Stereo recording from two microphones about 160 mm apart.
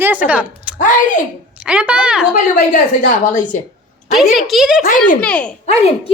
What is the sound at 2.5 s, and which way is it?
A woman's voice, 55° left (ahead or behind).